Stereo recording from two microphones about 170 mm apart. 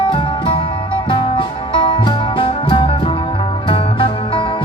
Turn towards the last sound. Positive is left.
turn(degrees=30)  # may be behind; listen again after turning